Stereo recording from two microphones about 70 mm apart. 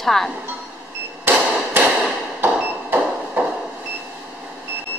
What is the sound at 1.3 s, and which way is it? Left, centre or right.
Hammer, right.